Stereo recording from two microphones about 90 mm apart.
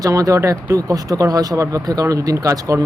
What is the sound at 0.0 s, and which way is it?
Speech, 40° right (ahead or behind).